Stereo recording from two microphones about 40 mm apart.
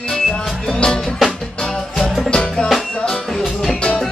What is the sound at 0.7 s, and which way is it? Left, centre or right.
Music, left.